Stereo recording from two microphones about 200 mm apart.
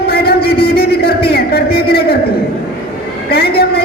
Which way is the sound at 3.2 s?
50° left (ahead or behind).